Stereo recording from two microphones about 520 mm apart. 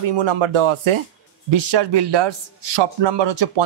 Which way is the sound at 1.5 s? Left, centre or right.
Right.